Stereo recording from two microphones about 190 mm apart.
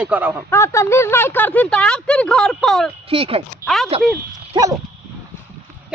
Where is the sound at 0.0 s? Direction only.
10° right (ahead or behind).